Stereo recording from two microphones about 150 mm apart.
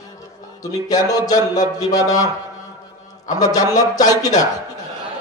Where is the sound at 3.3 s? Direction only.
25° left (ahead or behind).